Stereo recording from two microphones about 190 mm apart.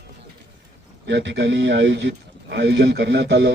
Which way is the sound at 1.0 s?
65° right (ahead or behind).